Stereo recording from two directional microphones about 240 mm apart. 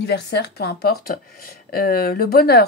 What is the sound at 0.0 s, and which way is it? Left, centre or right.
Speech, left.